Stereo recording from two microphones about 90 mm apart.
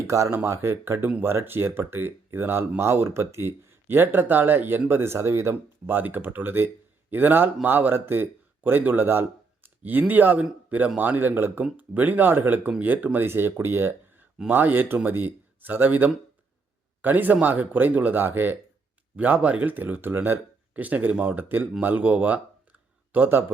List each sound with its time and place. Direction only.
0.1 s a man's voice: 35° right (ahead or behind)